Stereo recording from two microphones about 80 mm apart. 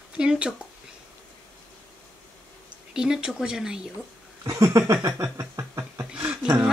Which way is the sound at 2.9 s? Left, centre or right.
Centre.